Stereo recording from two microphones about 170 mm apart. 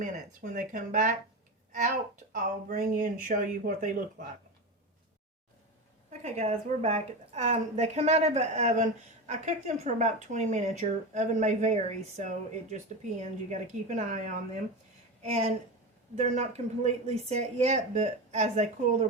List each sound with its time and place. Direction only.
0.5 s a woman's voice: 50° right (ahead or behind)
6.1 s a woman's voice: 45° right (ahead or behind)